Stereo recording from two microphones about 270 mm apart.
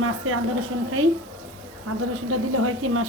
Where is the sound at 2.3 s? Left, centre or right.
Right.